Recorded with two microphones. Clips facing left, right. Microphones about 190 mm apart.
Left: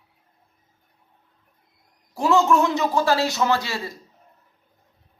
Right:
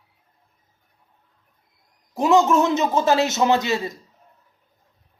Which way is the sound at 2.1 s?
20° right (ahead or behind).